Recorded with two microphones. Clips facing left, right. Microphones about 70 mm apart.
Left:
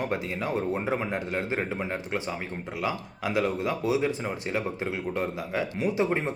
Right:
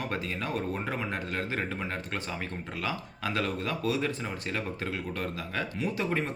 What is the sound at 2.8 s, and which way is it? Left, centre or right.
Speech, centre.